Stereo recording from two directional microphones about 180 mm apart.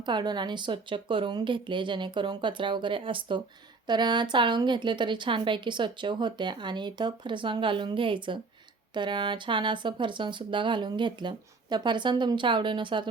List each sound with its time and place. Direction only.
0.0 s a woman's voice: 25° right (ahead or behind)